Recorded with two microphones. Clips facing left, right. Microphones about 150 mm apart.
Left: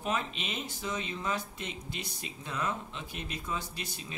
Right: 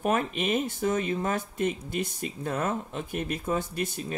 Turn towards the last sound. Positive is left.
turn(degrees=-50)  # may be behind; listen again after turning